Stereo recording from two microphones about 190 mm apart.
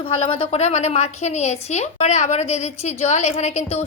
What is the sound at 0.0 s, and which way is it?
A woman's voice, 30° left (ahead or behind).